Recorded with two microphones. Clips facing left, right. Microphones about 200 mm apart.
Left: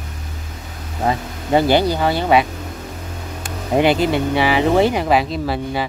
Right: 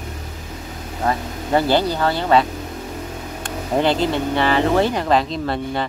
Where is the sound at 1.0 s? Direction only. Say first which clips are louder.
Left 1 dB; 15° left (ahead or behind).